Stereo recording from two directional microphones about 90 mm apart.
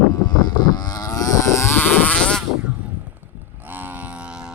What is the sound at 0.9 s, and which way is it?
Livestock, 45° left (ahead or behind).